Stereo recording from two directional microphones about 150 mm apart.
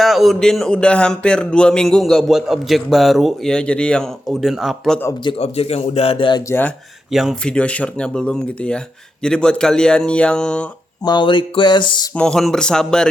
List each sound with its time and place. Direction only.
0.0 s speech: centre (ahead or behind)
5.2 s speech: 40° left (ahead or behind)
6.5 s speech: 10° left (ahead or behind)
7.1 s speech: centre (ahead or behind)
11.0 s speech: 30° left (ahead or behind)
12.1 s speech: 5° left (ahead or behind)